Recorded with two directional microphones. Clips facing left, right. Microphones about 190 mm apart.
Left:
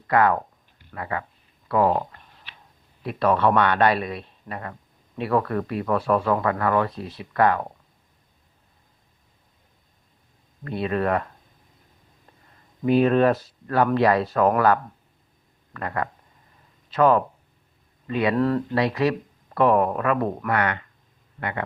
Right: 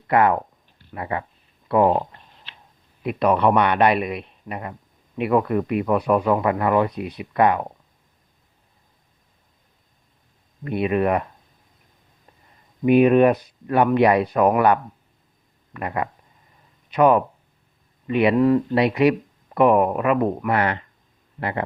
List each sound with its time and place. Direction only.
0.1 s speech: 25° right (ahead or behind)
1.6 s a sound: 25° right (ahead or behind)
3.0 s speech: 20° right (ahead or behind)
10.6 s speech: 20° right (ahead or behind)
12.8 s speech: 15° right (ahead or behind)
18.3 s speech: 10° right (ahead or behind)